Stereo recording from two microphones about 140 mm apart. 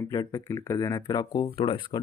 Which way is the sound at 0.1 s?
25° left (ahead or behind).